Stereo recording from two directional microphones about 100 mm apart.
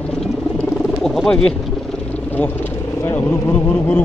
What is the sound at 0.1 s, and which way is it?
Wild animals, 5° left (ahead or behind).